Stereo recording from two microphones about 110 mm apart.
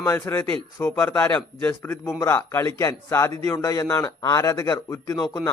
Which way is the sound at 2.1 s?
25° left (ahead or behind).